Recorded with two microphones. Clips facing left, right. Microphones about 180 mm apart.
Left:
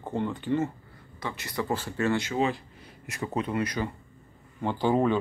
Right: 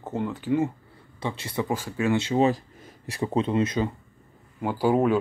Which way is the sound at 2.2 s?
35° right (ahead or behind).